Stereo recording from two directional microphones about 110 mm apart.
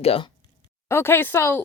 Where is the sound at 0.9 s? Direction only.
20° left (ahead or behind).